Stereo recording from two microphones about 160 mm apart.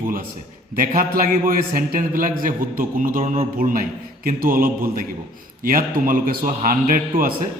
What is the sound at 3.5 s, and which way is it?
A man's voice, 60° right (ahead or behind).